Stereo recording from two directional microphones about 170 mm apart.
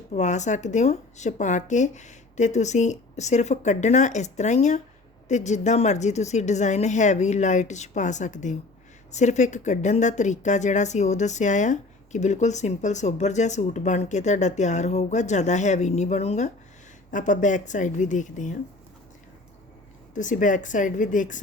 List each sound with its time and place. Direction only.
0.1 s a woman's voice: 45° left (ahead or behind)
20.1 s a woman's voice: 50° left (ahead or behind)